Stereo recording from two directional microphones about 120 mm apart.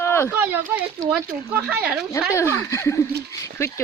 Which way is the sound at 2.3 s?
25° left (ahead or behind).